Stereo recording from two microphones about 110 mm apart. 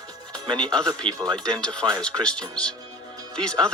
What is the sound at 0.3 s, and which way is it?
Music, 45° right (ahead or behind).